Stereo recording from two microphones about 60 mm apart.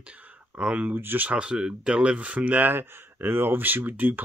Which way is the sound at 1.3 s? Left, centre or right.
Centre.